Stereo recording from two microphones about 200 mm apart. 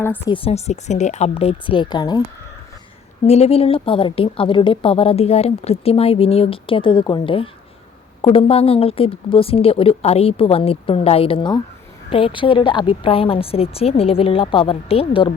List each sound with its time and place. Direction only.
0.3 s speech: 25° left (ahead or behind)
3.2 s speech: 30° left (ahead or behind)